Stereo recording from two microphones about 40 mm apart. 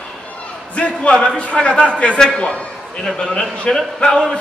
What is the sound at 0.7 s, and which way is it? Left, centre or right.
A man's voice, left.